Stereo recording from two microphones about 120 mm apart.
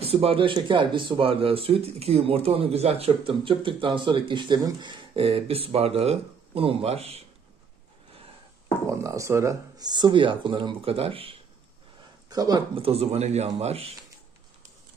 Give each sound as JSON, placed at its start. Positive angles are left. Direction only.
{"t": 0.0, "sound": "speech", "side_deg": -55}
{"t": 8.8, "sound": "speech", "side_deg": -25}
{"t": 12.3, "sound": "speech", "side_deg": -30}
{"t": 12.7, "sound": "speech", "side_deg": -55}